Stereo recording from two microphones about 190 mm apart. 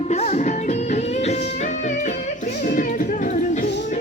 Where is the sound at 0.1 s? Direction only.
35° left (ahead or behind).